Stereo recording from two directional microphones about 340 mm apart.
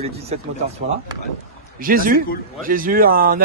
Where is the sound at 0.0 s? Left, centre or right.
Centre.